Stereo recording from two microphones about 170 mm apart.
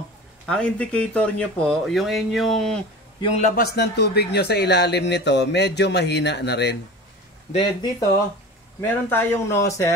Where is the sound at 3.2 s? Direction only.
40° left (ahead or behind).